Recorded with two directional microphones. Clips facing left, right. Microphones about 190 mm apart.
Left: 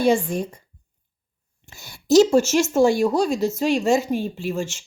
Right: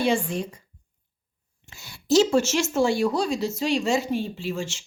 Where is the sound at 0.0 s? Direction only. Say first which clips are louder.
Left 4 dB; 45° left (ahead or behind).